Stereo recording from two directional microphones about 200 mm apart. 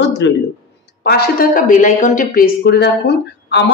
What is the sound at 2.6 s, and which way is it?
Speech, 55° left (ahead or behind).